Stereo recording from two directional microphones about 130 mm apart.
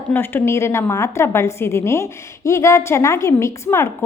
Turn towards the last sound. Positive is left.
turn(degrees=20)  # may be behind; listen again after turning